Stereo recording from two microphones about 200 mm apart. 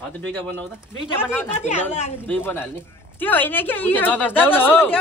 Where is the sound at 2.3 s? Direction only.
10° left (ahead or behind).